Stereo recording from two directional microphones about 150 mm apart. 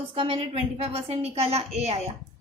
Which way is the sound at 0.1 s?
40° right (ahead or behind).